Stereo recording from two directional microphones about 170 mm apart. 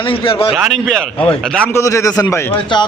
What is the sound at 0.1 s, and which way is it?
Speech, 35° left (ahead or behind).